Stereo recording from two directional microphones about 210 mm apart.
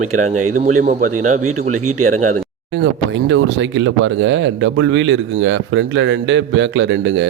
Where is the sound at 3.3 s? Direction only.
60° right (ahead or behind).